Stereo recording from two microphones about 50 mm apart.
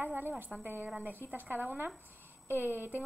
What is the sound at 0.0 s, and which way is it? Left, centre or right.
A woman's voice, right.